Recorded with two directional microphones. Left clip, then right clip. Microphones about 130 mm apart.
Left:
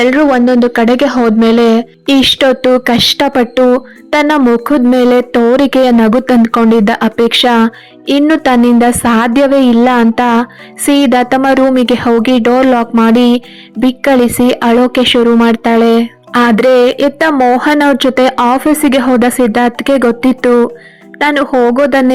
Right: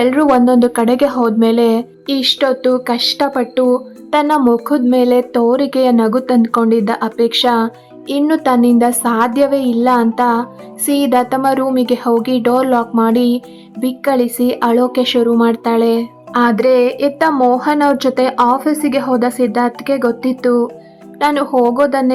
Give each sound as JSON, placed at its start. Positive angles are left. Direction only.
{"t": 0.0, "sound": "a woman's voice", "side_deg": 20}
{"t": 2.0, "sound": "speech", "side_deg": 35}
{"t": 4.1, "sound": "a woman's voice", "side_deg": 30}